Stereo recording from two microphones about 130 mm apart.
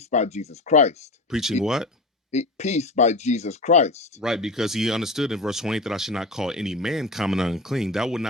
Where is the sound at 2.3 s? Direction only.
60° left (ahead or behind).